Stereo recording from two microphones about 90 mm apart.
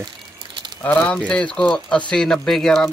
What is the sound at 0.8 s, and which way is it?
Speech, 20° left (ahead or behind).